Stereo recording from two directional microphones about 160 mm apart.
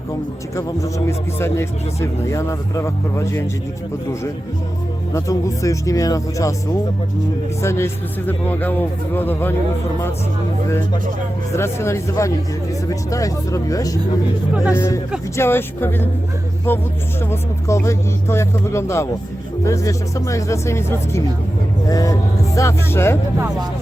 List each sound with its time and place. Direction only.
0.5 s speech: 20° left (ahead or behind)
5.1 s speech: 20° left (ahead or behind)
7.6 s speech: 15° left (ahead or behind)
11.5 s speech: 15° left (ahead or behind)
14.5 s speech: 5° right (ahead or behind)
14.8 s speech: 20° left (ahead or behind)